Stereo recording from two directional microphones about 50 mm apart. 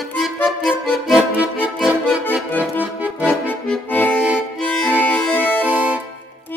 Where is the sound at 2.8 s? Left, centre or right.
Right.